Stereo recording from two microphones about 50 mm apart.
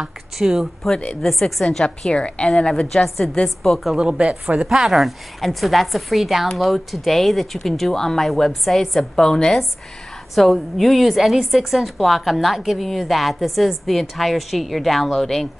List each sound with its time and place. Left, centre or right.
0.0 s speech: centre
1.2 s a woman's voice: centre
3.9 s speech: centre
4.6 s speech: centre
4.9 s a woman's voice: centre
10.3 s a woman's voice: centre